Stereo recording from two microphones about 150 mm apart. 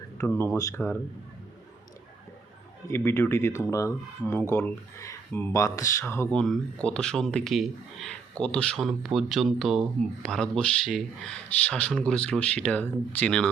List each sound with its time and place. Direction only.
0.2 s speech: 15° left (ahead or behind)
2.9 s speech: 15° left (ahead or behind)
6.3 s speech: 5° left (ahead or behind)